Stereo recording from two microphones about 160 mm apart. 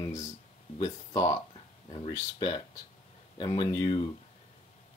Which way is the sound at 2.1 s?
25° left (ahead or behind).